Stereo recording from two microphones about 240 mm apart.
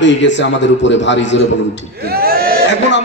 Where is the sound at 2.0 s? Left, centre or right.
Right.